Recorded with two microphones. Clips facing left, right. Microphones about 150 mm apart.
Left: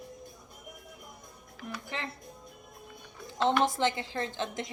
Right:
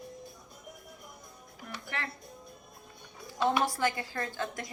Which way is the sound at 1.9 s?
20° left (ahead or behind).